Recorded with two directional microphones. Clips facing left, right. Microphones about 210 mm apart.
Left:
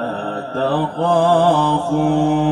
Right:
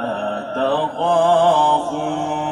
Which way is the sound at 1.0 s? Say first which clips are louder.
Left 1 dB; 40° left (ahead or behind).